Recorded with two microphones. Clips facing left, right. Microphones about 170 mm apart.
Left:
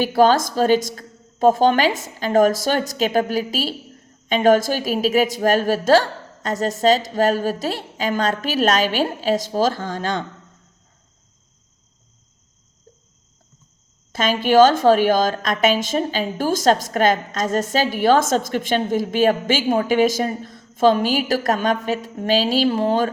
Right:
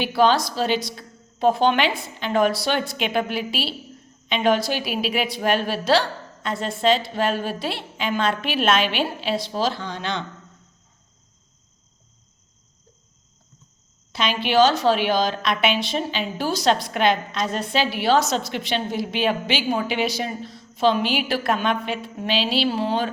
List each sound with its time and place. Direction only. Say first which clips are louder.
0.0 s a woman's voice: left 3 dB; 45° left (ahead or behind)
14.1 s a woman's voice: left 5 dB; 45° left (ahead or behind)